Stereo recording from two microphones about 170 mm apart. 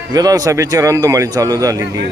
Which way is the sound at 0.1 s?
20° right (ahead or behind).